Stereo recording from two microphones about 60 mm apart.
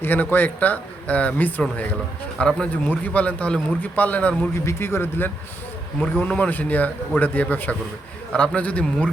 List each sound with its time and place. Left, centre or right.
0.0 s speech: left
4.6 s speech: left